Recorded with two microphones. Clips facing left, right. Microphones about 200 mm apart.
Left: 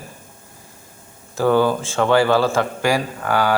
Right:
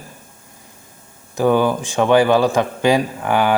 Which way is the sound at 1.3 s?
15° right (ahead or behind).